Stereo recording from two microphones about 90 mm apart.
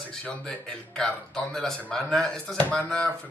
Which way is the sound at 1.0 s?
5° left (ahead or behind).